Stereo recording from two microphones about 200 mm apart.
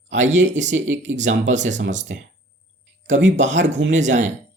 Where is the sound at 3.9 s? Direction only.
35° right (ahead or behind).